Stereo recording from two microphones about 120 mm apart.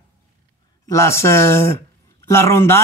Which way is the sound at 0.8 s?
20° left (ahead or behind).